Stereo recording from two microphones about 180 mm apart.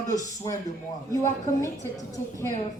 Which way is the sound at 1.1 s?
15° left (ahead or behind).